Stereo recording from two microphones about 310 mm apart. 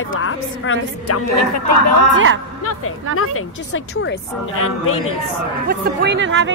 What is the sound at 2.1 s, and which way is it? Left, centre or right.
Speech, right.